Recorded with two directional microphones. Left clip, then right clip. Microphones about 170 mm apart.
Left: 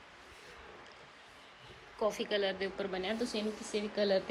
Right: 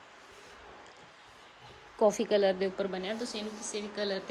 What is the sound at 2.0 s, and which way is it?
Speech, 35° right (ahead or behind).